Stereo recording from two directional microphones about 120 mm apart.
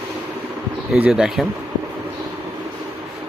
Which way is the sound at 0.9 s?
5° right (ahead or behind).